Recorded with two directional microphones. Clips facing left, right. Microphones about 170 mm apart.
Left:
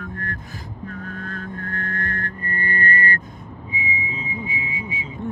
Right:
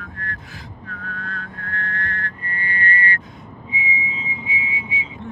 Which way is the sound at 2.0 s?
45° left (ahead or behind).